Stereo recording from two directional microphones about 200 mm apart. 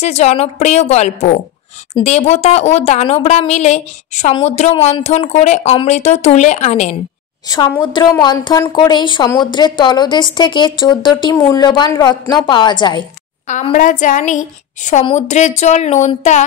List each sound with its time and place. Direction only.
0.0 s speech: 35° left (ahead or behind)
7.4 s a woman's voice: 20° left (ahead or behind)
13.5 s speech: 35° left (ahead or behind)